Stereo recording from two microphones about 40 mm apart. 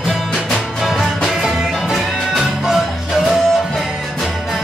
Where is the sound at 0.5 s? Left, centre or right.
Centre.